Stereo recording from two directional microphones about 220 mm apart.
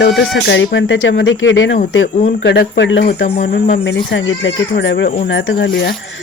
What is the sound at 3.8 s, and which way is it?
Speech, 55° left (ahead or behind).